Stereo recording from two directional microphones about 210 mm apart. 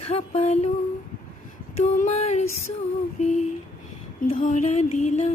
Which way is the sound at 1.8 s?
35° left (ahead or behind).